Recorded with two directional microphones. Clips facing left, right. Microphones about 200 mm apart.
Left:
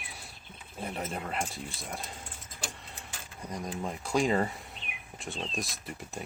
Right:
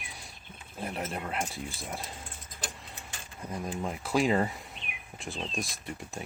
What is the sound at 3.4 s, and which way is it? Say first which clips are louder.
Speech: right 1 dB; 5° right (ahead or behind).